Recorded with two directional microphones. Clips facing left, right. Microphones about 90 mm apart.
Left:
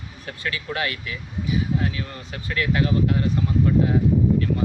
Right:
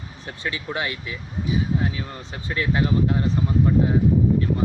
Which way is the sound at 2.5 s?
25° right (ahead or behind).